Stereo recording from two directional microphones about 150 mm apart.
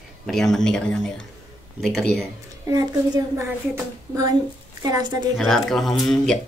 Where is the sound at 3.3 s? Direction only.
20° right (ahead or behind).